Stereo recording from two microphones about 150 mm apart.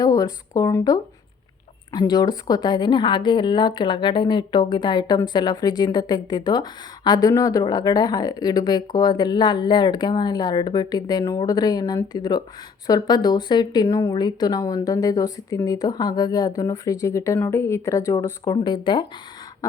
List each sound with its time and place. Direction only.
0.0 s a woman's voice: 25° left (ahead or behind)